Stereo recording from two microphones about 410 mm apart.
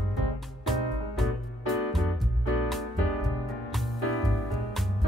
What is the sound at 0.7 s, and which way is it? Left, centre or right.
Music, centre.